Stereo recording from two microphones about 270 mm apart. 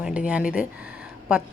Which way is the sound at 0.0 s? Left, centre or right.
Centre.